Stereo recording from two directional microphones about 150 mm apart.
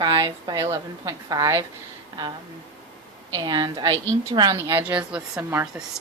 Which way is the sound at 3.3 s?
30° right (ahead or behind).